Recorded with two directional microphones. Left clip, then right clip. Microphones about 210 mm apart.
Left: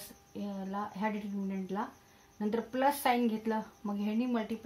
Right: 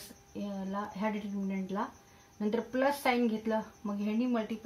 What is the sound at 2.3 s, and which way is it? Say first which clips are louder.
Speech: right 1 dB; 30° left (ahead or behind).